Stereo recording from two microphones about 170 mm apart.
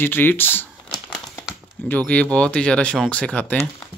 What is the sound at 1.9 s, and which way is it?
Speech, 10° left (ahead or behind).